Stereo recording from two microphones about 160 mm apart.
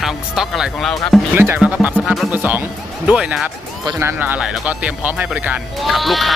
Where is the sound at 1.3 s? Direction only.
15° right (ahead or behind).